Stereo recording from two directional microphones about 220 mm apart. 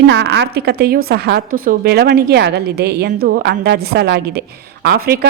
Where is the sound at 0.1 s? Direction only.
50° right (ahead or behind).